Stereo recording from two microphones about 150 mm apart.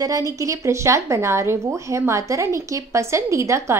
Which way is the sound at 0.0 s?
25° right (ahead or behind).